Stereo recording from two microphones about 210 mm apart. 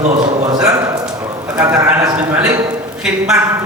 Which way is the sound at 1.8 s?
15° right (ahead or behind).